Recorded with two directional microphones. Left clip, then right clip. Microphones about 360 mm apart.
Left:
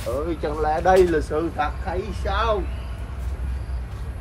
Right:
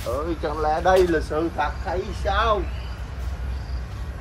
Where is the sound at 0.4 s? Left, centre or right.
Centre.